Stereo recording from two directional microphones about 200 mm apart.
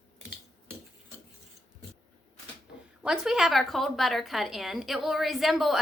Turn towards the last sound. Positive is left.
turn(degrees=0)  # may be behind; listen again after turning